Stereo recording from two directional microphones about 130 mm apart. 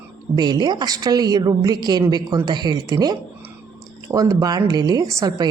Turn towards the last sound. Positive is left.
turn(degrees=-30)  # may be behind; listen again after turning